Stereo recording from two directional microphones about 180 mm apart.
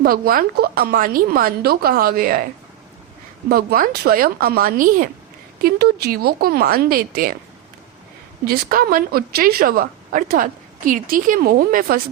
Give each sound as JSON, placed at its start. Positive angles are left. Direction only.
{"t": 0.0, "sound": "a woman's voice", "side_deg": -55}
{"t": 3.5, "sound": "a woman's voice", "side_deg": -55}
{"t": 8.4, "sound": "a woman's voice", "side_deg": -50}